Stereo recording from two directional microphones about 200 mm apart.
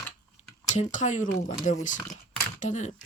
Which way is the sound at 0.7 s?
35° left (ahead or behind).